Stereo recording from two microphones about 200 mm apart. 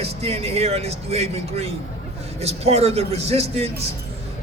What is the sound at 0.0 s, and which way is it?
Speech, 30° right (ahead or behind).